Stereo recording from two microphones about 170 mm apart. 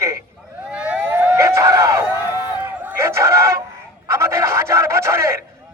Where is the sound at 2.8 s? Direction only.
15° right (ahead or behind).